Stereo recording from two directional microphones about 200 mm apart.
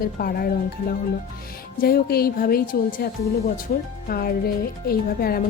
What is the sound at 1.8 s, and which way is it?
Speech, 50° left (ahead or behind).